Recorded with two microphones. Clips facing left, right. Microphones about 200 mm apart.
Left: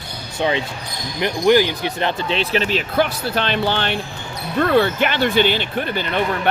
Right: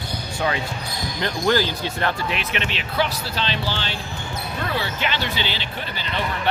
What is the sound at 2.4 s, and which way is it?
Speech, 35° left (ahead or behind).